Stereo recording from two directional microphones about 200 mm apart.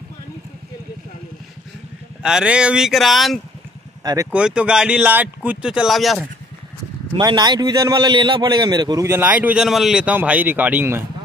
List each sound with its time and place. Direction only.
2.2 s speech: 5° right (ahead or behind)
4.0 s speech: 20° right (ahead or behind)
4.3 s speech: 5° right (ahead or behind)
7.2 s a man's voice: 20° right (ahead or behind)